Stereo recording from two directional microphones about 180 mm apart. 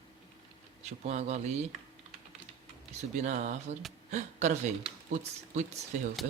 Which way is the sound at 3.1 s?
40° right (ahead or behind).